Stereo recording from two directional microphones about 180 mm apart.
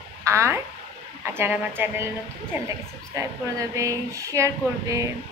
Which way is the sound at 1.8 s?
10° right (ahead or behind).